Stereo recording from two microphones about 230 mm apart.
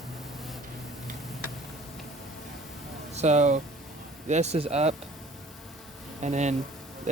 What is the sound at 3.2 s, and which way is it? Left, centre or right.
Speech, right.